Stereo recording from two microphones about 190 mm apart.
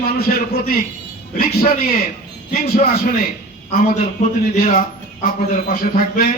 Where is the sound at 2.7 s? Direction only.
50° left (ahead or behind).